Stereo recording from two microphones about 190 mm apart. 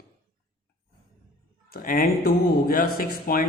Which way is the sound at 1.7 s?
50° left (ahead or behind).